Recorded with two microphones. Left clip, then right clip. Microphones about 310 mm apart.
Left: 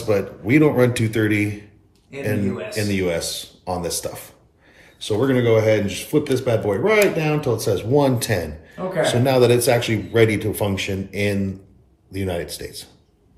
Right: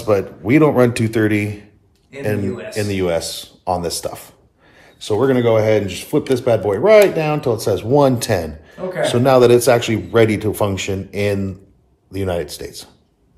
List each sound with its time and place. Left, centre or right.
0.1 s speech: centre
2.7 s speech: centre